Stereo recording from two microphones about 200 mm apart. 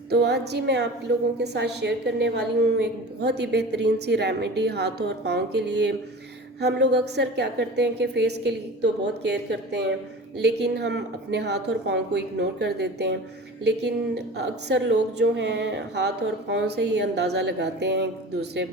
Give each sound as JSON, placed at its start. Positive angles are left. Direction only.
{"t": 0.1, "sound": "a woman's voice", "side_deg": -55}